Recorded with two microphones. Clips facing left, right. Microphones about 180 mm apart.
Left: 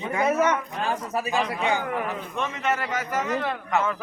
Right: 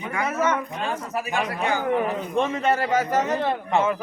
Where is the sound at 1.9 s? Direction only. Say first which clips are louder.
Right 6 dB; 25° right (ahead or behind).